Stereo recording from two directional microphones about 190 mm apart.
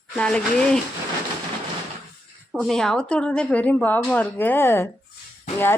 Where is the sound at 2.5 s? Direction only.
Centre (ahead or behind).